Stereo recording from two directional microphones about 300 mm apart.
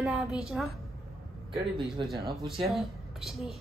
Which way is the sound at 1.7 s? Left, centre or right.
Centre.